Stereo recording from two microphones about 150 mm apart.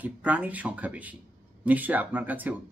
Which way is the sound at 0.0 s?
10° right (ahead or behind).